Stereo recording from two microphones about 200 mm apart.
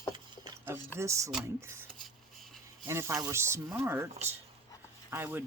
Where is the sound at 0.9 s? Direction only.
15° right (ahead or behind).